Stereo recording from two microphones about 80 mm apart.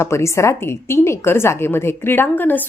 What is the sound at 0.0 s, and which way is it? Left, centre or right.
A woman's voice, left.